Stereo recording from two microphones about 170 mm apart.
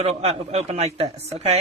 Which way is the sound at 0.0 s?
40° right (ahead or behind).